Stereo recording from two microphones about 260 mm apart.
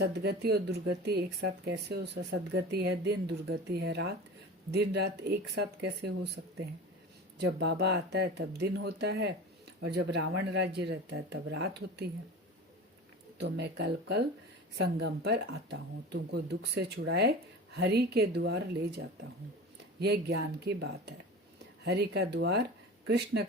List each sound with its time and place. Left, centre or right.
0.0 s speech: right
13.4 s speech: right